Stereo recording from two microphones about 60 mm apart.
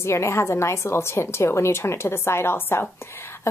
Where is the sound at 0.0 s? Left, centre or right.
Left.